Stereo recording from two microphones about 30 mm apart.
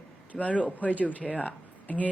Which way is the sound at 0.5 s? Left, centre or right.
Left.